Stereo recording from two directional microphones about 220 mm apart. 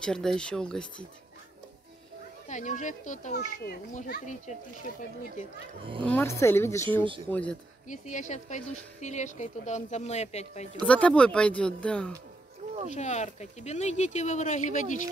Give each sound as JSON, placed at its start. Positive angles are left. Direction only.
{"t": 0.0, "sound": "speech", "side_deg": 5}
{"t": 2.4, "sound": "speech", "side_deg": 35}
{"t": 6.0, "sound": "a woman's voice", "side_deg": 10}
{"t": 7.9, "sound": "speech", "side_deg": 35}
{"t": 10.8, "sound": "speech", "side_deg": 5}
{"t": 12.9, "sound": "speech", "side_deg": 30}